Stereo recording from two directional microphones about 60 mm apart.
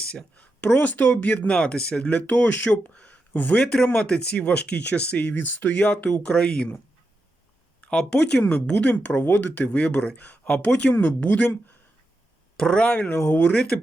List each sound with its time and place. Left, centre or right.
0.0 s speech: centre
2.9 s a sound: centre
3.3 s speech: left
3.6 s speech: centre
7.8 s speech: centre
8.4 s speech: left
12.5 s speech: centre
12.8 s speech: left
13.1 s speech: left
13.4 s speech: centre